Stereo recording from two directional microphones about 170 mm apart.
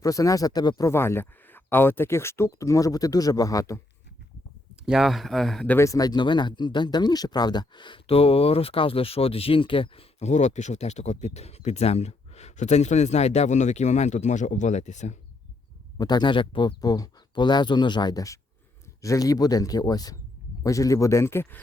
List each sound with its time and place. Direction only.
0.0 s speech: 20° left (ahead or behind)
4.9 s speech: centre (ahead or behind)
5.7 s speech: 20° left (ahead or behind); by 15.2 s 45° left (ahead or behind)
16.0 s speech: 25° left (ahead or behind)